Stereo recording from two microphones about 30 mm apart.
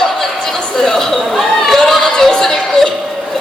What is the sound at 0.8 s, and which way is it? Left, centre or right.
Chatter, centre.